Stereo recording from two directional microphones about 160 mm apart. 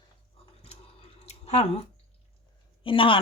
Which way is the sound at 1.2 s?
40° left (ahead or behind).